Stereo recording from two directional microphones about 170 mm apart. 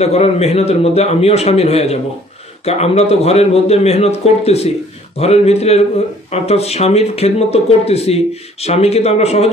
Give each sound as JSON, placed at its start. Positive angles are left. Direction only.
{"t": 0.0, "sound": "speech", "side_deg": 40}